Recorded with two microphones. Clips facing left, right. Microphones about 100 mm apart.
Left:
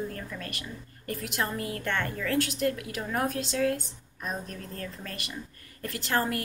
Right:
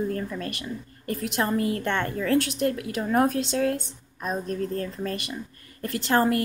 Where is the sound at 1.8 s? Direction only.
20° right (ahead or behind).